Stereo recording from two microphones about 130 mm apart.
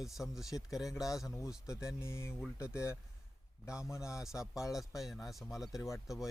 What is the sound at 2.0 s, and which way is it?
Speech, 20° left (ahead or behind).